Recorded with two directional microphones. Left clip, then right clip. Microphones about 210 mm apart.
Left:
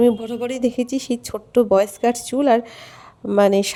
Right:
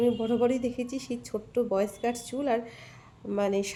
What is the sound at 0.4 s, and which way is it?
A woman's voice, 40° left (ahead or behind).